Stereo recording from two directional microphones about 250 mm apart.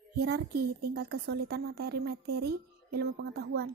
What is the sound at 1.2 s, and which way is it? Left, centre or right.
A woman's voice, right.